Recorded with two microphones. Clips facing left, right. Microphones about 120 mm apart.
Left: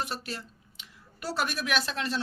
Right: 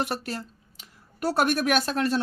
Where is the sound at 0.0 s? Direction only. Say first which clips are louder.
Right 6 dB; 60° right (ahead or behind).